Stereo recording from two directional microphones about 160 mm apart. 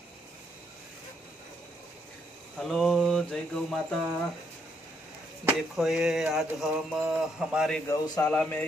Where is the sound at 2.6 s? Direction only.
Centre (ahead or behind).